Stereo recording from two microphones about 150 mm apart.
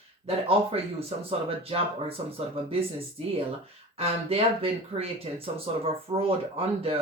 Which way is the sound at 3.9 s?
40° right (ahead or behind).